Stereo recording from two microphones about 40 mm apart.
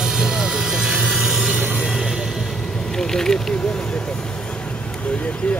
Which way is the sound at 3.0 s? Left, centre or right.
Centre.